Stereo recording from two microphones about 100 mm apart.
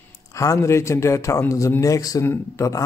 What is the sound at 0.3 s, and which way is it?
A man's voice, 35° left (ahead or behind).